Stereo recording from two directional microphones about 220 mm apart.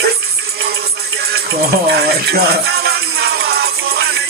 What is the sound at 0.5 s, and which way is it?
Music, 45° right (ahead or behind).